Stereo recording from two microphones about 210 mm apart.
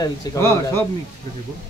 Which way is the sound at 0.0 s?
15° left (ahead or behind).